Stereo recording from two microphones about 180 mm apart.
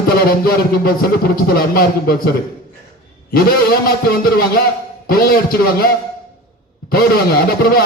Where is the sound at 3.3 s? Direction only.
55° left (ahead or behind).